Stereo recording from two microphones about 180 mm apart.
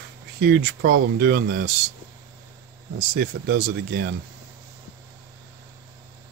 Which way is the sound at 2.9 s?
60° right (ahead or behind).